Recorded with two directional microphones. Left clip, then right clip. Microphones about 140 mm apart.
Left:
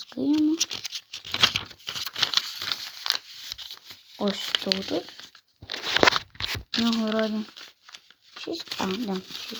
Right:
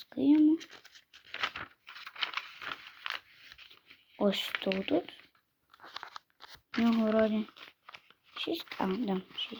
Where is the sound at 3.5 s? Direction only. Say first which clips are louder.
Left 15 dB; 5° right (ahead or behind).